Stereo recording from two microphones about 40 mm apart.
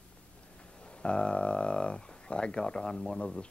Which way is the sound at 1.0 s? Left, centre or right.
Left.